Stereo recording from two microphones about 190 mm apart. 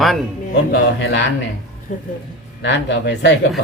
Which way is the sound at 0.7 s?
65° left (ahead or behind).